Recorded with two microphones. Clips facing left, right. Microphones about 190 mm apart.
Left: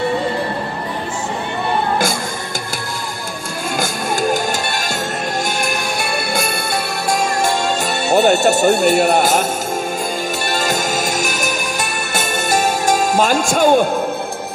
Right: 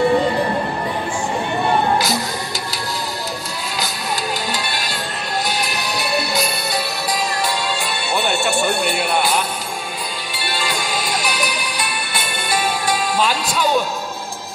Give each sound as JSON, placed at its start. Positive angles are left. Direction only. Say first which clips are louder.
{"t": 3.8, "sound": "music", "louder": "left 7 dB", "side_deg": 50}